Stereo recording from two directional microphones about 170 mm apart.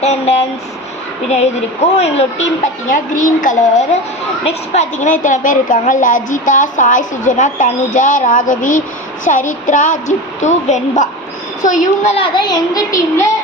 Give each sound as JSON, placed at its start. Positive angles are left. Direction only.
{"t": 0.0, "sound": "a woman's voice", "side_deg": 40}
{"t": 2.9, "sound": "a woman's voice", "side_deg": 50}
{"t": 12.1, "sound": "a child's voice", "side_deg": 30}